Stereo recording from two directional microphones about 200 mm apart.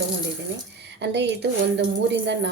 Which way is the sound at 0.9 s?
60° right (ahead or behind).